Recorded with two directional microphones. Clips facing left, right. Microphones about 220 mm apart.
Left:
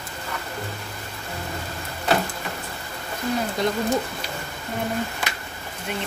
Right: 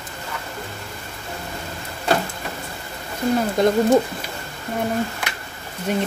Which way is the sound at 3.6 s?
50° right (ahead or behind).